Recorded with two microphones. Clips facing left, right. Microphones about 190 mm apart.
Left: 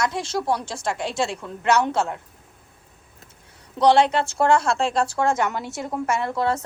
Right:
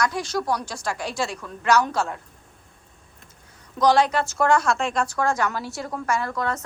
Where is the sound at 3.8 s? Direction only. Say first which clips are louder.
Left 2 dB; 30° left (ahead or behind).